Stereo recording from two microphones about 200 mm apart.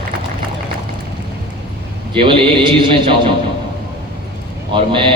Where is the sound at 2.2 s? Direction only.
25° right (ahead or behind).